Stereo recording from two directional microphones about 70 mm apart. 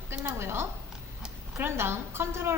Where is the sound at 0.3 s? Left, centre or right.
Right.